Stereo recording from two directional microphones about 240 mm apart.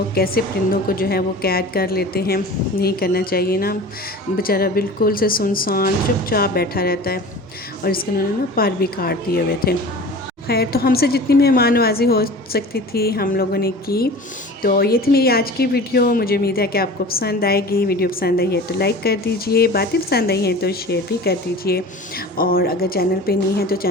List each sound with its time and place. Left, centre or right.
0.1 s a woman's voice: left